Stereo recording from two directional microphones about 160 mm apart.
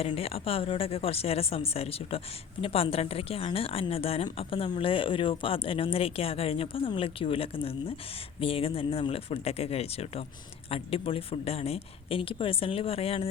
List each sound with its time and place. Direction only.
0.0 s speech: 40° left (ahead or behind)